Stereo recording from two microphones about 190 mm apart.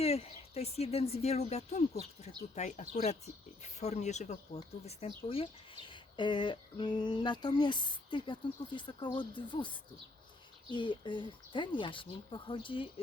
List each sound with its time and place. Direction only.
0.0 s speech: 30° left (ahead or behind)